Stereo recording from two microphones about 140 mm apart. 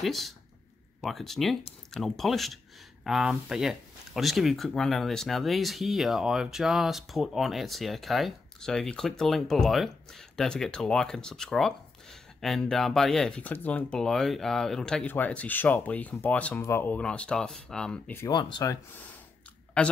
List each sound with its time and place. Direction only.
0.0 s speech: centre (ahead or behind)
18.3 s speech: 35° left (ahead or behind)
18.7 s speech: 15° left (ahead or behind)